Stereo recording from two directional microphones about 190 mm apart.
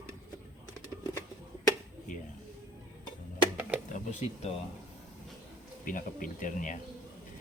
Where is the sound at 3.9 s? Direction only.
40° left (ahead or behind).